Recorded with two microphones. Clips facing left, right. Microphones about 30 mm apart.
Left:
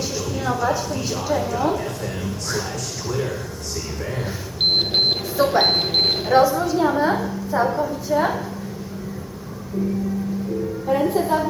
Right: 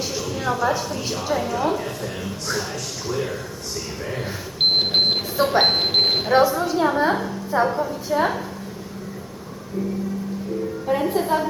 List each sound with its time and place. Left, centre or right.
0.0 s a woman's voice: centre
10.8 s a woman's voice: centre